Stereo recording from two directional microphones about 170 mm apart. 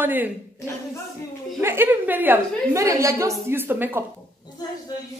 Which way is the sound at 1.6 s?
15° right (ahead or behind).